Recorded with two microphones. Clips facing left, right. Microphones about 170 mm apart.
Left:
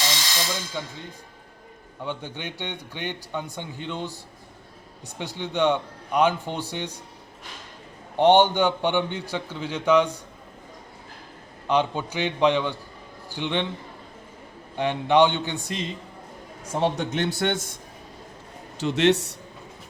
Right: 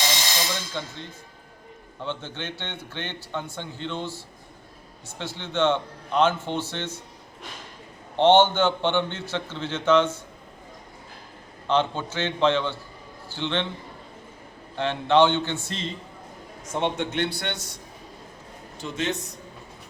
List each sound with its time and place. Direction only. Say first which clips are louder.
0.8 s a man's voice: even; 10° left (ahead or behind)
2.0 s a man's voice: even; 10° left (ahead or behind)
8.1 s a man's voice: even; 15° left (ahead or behind)
11.7 s a man's voice: left 1 dB; 15° left (ahead or behind)
14.8 s a man's voice: even; 15° left (ahead or behind)
16.8 s a man's voice: left 2 dB; 40° left (ahead or behind)
18.8 s a man's voice: left 9 dB; 75° left (ahead or behind)